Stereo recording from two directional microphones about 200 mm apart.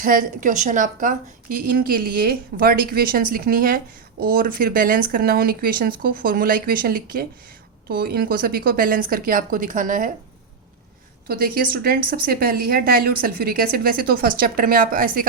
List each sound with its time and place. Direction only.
0.0 s a woman's voice: 45° right (ahead or behind)
11.3 s a woman's voice: 45° right (ahead or behind)